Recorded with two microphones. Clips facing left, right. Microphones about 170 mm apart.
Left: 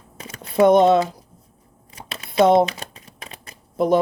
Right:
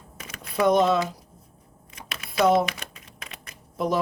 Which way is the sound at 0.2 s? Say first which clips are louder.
Left 8 dB; 30° left (ahead or behind).